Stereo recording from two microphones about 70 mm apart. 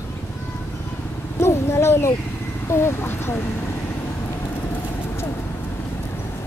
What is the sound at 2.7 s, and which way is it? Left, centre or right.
Speech, left.